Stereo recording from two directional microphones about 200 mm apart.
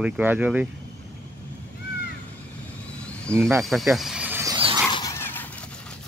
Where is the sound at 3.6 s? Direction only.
Centre (ahead or behind).